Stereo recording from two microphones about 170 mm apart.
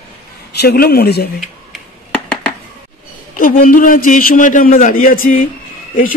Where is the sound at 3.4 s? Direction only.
55° left (ahead or behind).